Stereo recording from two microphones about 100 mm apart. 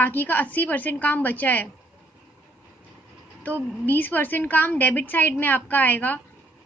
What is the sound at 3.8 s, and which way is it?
A woman's voice, 20° left (ahead or behind).